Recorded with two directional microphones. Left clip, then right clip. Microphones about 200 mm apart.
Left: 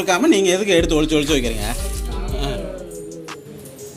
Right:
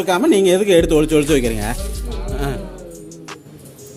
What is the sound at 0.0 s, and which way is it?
Speech, 30° right (ahead or behind).